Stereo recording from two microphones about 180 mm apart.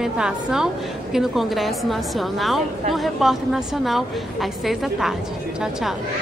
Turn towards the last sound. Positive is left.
turn(degrees=0)  # may be behind; listen again after turning